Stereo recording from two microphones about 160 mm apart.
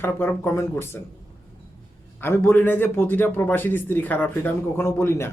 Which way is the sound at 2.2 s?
15° left (ahead or behind).